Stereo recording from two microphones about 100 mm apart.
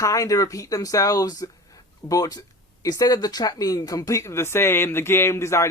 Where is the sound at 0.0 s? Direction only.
35° left (ahead or behind).